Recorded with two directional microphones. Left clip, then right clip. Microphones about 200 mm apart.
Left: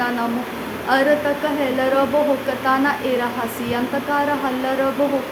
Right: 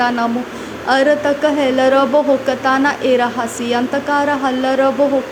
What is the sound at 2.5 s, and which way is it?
Speech, 25° right (ahead or behind).